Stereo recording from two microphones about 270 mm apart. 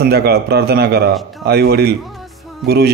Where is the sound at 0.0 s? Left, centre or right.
Right.